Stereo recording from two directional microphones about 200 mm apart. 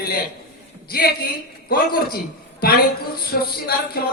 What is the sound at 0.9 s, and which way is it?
A woman's voice, 50° left (ahead or behind).